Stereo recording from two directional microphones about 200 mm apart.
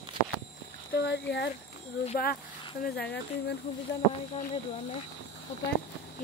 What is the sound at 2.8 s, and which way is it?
Speech, 55° left (ahead or behind).